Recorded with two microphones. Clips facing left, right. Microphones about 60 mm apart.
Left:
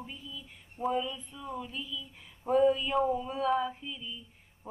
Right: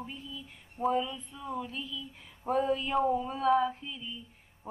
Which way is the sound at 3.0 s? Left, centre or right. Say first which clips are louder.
Right 2 dB; right.